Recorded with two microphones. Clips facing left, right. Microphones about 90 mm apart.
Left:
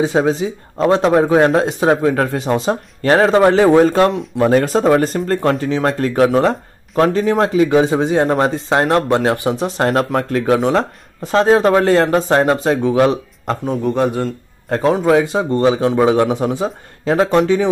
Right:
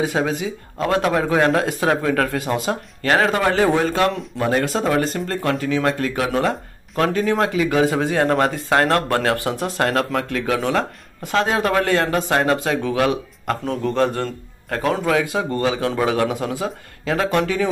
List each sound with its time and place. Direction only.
0.0 s speech: 30° left (ahead or behind)
13.8 s a man's voice: 15° left (ahead or behind)
14.7 s speech: 25° left (ahead or behind)